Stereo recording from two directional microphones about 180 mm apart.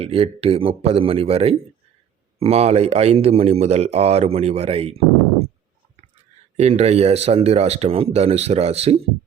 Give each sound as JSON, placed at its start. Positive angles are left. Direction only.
{"t": 0.0, "sound": "speech", "side_deg": -30}
{"t": 6.6, "sound": "speech", "side_deg": -35}